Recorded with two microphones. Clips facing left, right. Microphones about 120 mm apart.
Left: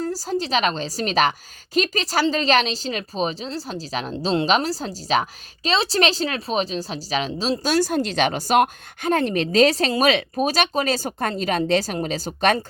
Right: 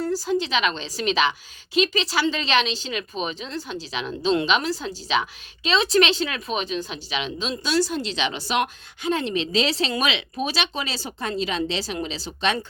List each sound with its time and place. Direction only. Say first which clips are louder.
0.0 s a woman's voice: right 1 dB; 40° left (ahead or behind)